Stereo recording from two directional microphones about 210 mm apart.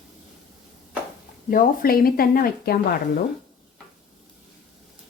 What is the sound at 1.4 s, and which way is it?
Speech, 45° left (ahead or behind).